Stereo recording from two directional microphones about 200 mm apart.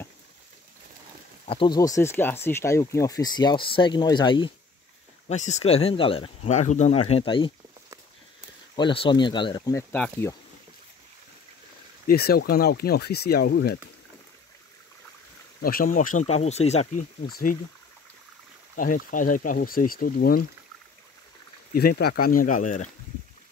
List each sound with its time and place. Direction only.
1.5 s speech: 20° left (ahead or behind)
5.3 s speech: 35° left (ahead or behind)
8.7 s speech: 25° left (ahead or behind); by 10.3 s 10° left (ahead or behind)
12.1 s speech: 50° left (ahead or behind)
15.6 s speech: 45° left (ahead or behind)
18.8 s speech: 45° left (ahead or behind)
21.7 s speech: 55° left (ahead or behind)